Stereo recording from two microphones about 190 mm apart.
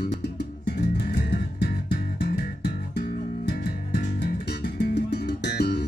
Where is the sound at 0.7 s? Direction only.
55° left (ahead or behind).